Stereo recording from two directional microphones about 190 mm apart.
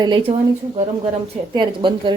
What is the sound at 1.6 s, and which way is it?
Speech, 25° right (ahead or behind).